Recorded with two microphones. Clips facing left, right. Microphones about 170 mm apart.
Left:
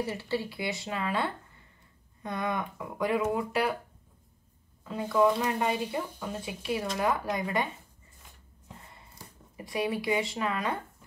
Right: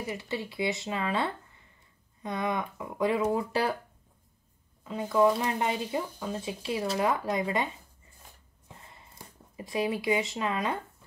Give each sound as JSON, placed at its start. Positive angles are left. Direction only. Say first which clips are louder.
{"t": 0.0, "sound": "speech", "louder": "left 3 dB", "side_deg": -15}
{"t": 4.8, "sound": "speech", "louder": "right 1 dB", "side_deg": -20}
{"t": 9.6, "sound": "speech", "louder": "right 1 dB", "side_deg": -25}